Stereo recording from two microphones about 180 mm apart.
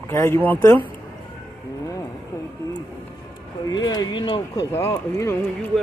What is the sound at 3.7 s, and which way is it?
Speech, 20° left (ahead or behind).